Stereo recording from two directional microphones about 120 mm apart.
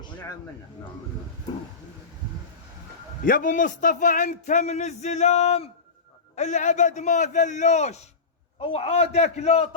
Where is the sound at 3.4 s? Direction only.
90° left; by 5.7 s 60° left (ahead or behind).